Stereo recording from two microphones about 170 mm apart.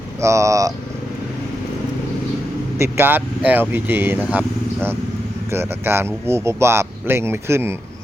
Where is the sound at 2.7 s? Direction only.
15° right (ahead or behind).